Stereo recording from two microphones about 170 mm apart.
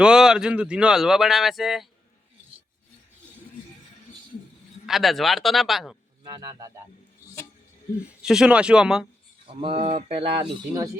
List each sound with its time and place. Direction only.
0.0 s speech: 5° right (ahead or behind)
4.9 s speech: centre (ahead or behind)
6.3 s speech: 20° right (ahead or behind)
8.0 s speech: 5° right (ahead or behind)
9.5 s speech: 30° right (ahead or behind)